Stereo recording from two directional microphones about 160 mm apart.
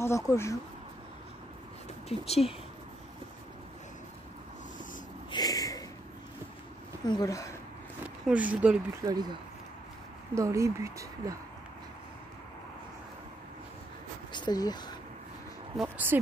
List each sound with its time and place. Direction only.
0.0 s speech: 15° left (ahead or behind)
2.0 s speech: 40° left (ahead or behind)
5.3 s a sound: 25° left (ahead or behind)
7.1 s speech: 20° left (ahead or behind)
8.3 s speech: 10° right (ahead or behind)
9.0 s speech: 25° right (ahead or behind)
14.3 s a sound: 25° left (ahead or behind)
15.8 s speech: 10° right (ahead or behind)